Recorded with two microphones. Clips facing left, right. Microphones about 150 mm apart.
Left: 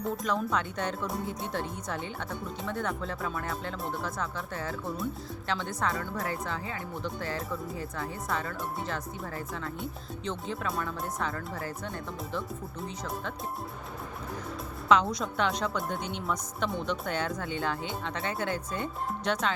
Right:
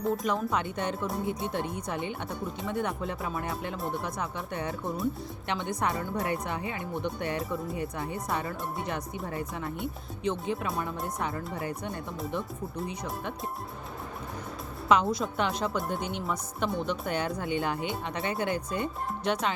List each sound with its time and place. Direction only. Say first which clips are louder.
0.0 s speech: right 2 dB; 5° right (ahead or behind)
2.6 s speech: right 2 dB; 15° right (ahead or behind)
11.2 s speech: right 1 dB; 20° right (ahead or behind)
14.8 s speech: even; 5° right (ahead or behind)